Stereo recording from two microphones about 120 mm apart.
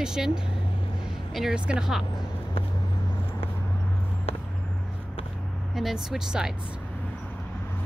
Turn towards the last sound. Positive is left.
turn(degrees=-5)  # may be behind; listen again after turning